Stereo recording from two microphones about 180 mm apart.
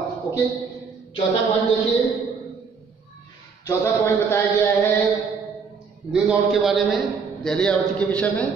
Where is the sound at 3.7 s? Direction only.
15° left (ahead or behind).